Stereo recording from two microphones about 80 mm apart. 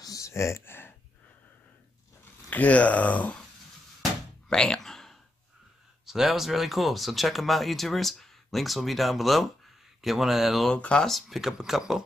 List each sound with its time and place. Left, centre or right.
0.0 s a sound: left
2.5 s speech: centre
4.5 s a sound: centre
6.0 s speech: centre
10.7 s speech: centre
11.1 s speech: centre